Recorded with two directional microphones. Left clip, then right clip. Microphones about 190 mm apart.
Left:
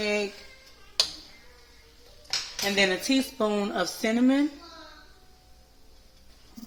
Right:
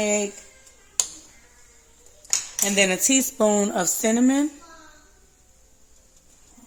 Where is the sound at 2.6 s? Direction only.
60° right (ahead or behind).